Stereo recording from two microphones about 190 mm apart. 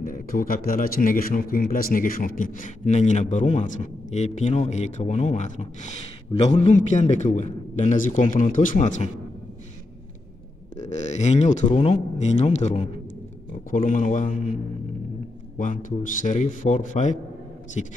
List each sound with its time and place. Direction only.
0.0 s a man's voice: 45° left (ahead or behind)
10.8 s a man's voice: 35° left (ahead or behind)
15.5 s a man's voice: 45° left (ahead or behind)